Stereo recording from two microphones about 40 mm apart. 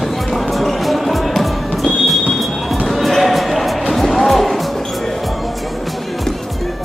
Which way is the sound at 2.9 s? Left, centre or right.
Centre.